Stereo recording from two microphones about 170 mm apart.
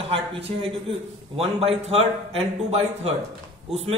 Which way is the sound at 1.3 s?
35° right (ahead or behind).